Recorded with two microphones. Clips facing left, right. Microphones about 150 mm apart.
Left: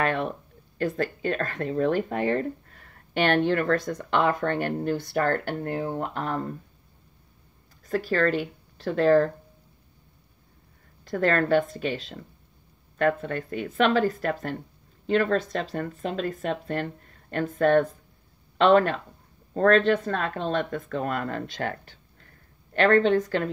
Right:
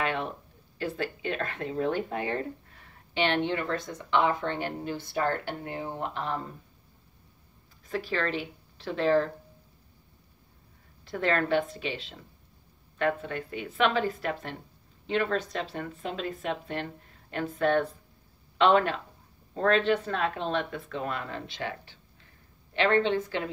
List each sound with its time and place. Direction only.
0.0 s a sound: 45° left (ahead or behind)
0.7 s speech: 45° left (ahead or behind)
7.9 s speech: 45° left (ahead or behind)
11.1 s speech: 45° left (ahead or behind)
22.8 s speech: 45° left (ahead or behind)